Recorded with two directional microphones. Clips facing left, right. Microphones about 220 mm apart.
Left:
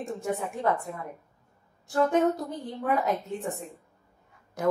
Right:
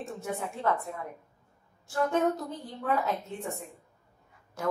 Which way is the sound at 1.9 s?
15° left (ahead or behind).